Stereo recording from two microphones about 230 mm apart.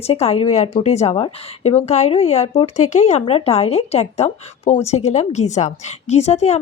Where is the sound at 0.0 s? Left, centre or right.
Left.